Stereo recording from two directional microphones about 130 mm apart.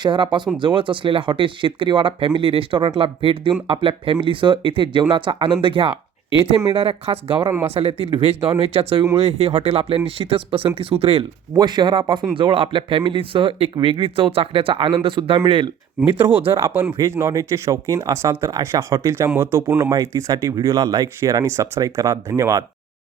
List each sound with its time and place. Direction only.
0.0 s speech: 40° right (ahead or behind)
11.5 s speech: 35° right (ahead or behind)
16.0 s speech: 15° right (ahead or behind)